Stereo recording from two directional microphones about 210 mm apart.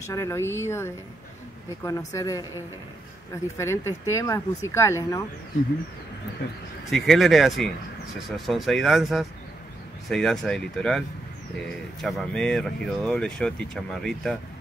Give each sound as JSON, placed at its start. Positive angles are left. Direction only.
{"t": 0.0, "sound": "speech", "side_deg": 15}
{"t": 3.5, "sound": "speech", "side_deg": 15}
{"t": 6.9, "sound": "speech", "side_deg": 0}